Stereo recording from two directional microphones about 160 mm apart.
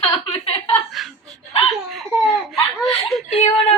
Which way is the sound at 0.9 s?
Centre (ahead or behind).